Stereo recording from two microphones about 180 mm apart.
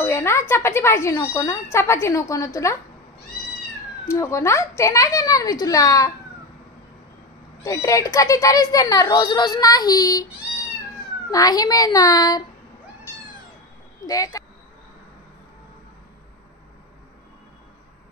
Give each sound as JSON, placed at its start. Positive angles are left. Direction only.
{"t": 0.0, "sound": "speech", "side_deg": 15}
{"t": 4.1, "sound": "speech", "side_deg": 15}
{"t": 7.6, "sound": "a child's voice", "side_deg": 20}
{"t": 11.2, "sound": "a child's voice", "side_deg": 20}
{"t": 14.0, "sound": "a child's voice", "side_deg": 20}